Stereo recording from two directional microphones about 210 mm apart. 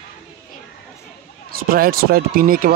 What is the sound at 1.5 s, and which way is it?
Speech, 45° right (ahead or behind).